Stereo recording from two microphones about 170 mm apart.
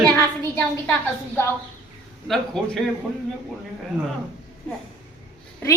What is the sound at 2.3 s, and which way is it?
Speech, 5° left (ahead or behind).